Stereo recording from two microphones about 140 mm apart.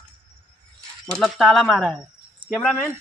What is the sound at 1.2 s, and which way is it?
Speech, centre (ahead or behind).